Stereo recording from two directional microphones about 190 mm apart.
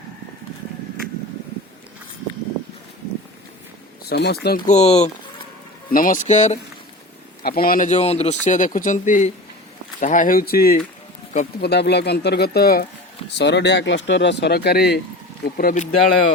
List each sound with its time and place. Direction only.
4.1 s speech: 55° left (ahead or behind); by 5.1 s 35° left (ahead or behind)
5.9 s speech: 45° left (ahead or behind)
7.4 s speech: 50° left (ahead or behind)
13.2 s speech: 65° left (ahead or behind); by 16.3 s 45° left (ahead or behind)